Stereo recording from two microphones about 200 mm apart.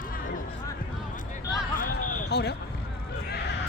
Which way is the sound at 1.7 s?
45° left (ahead or behind).